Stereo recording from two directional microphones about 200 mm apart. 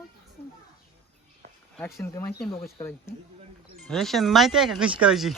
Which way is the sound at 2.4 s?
Centre (ahead or behind).